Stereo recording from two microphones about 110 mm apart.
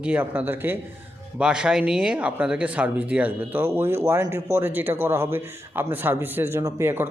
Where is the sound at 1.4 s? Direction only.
10° right (ahead or behind).